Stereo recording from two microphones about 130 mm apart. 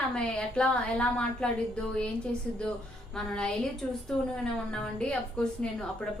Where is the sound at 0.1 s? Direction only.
5° left (ahead or behind).